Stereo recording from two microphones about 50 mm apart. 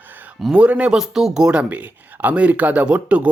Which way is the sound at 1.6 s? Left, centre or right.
Right.